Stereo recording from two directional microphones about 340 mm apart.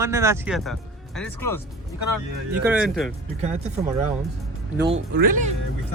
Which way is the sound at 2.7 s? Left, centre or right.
Centre.